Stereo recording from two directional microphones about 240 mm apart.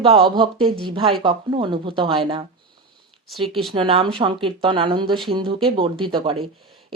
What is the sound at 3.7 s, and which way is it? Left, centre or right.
Speech, right.